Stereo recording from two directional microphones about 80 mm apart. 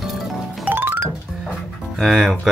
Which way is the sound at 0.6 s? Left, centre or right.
Right.